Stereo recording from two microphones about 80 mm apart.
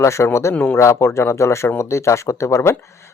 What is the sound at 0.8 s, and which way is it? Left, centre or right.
Speech, left.